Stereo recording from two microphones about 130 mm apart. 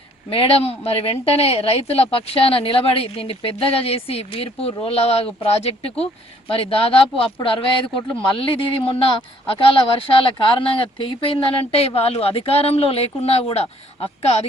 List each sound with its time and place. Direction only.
0.3 s a woman's voice: 45° left (ahead or behind)